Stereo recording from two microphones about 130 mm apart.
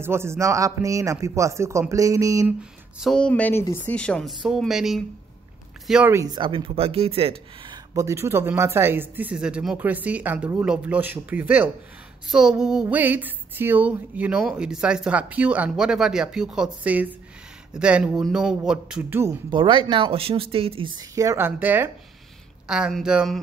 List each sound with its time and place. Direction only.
0.0 s a man's voice: 20° right (ahead or behind)
3.0 s speech: 5° left (ahead or behind)
6.1 s speech: 30° right (ahead or behind); by 7.7 s 50° right (ahead or behind)
7.7 s speech: 25° right (ahead or behind)
19.5 s speech: 40° right (ahead or behind); by 21.9 s 15° right (ahead or behind)
22.7 s speech: 5° right (ahead or behind)